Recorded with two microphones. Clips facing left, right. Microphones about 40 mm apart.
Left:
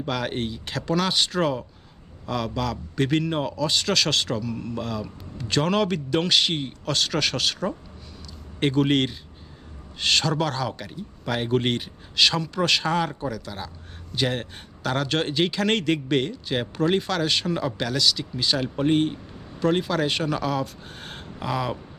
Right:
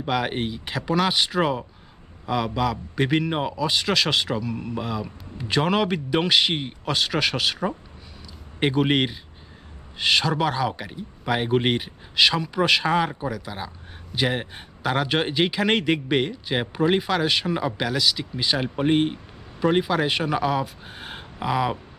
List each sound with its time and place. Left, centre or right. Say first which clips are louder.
0.0 s a man's voice: right 2 dB; centre